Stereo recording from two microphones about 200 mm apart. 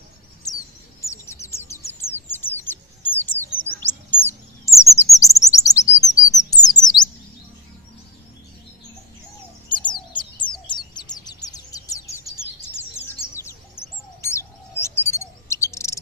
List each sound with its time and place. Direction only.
1.0 s bird: 15° left (ahead or behind)
3.6 s chirp: 10° left (ahead or behind)
9.6 s bird: 25° left (ahead or behind)